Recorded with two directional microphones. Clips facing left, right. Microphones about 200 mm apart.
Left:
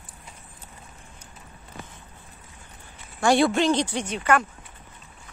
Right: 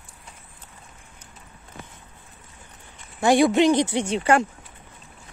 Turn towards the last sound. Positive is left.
turn(degrees=-30)  # may be behind; listen again after turning